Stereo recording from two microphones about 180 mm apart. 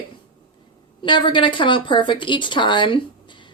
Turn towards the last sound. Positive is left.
turn(degrees=25)  # may be behind; listen again after turning